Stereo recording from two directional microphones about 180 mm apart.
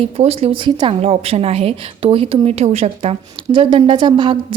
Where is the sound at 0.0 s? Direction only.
35° right (ahead or behind).